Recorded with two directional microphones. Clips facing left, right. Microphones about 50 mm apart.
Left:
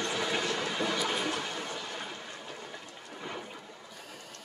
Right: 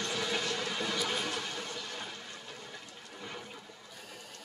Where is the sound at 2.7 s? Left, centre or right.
Centre.